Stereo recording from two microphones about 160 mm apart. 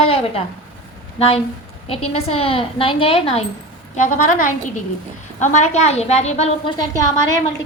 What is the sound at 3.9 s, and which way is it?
A woman's voice, 50° left (ahead or behind).